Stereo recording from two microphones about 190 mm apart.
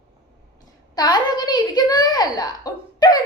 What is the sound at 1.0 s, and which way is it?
Speech, 20° left (ahead or behind).